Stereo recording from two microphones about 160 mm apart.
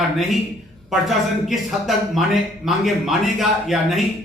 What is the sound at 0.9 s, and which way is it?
Speech, centre (ahead or behind).